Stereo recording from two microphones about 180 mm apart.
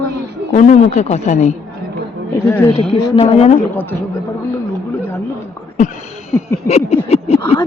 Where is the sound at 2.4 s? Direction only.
10° left (ahead or behind).